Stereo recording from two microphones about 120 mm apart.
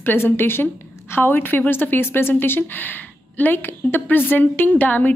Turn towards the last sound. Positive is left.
turn(degrees=15)  # may be behind; listen again after turning